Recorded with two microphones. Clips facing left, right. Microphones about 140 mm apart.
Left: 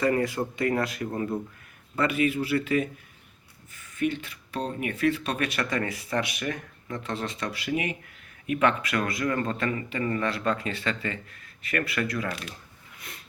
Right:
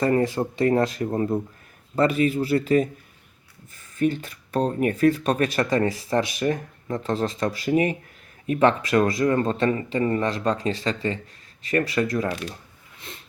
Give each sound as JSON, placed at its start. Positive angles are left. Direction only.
{"t": 0.0, "sound": "speech", "side_deg": -35}
{"t": 12.0, "sound": "speech", "side_deg": -40}
{"t": 13.0, "sound": "a sound", "side_deg": -25}